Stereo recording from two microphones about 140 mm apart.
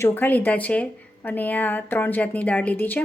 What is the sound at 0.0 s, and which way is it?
A woman's voice, 15° left (ahead or behind).